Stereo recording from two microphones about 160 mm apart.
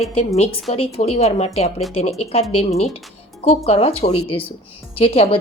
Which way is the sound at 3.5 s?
40° left (ahead or behind).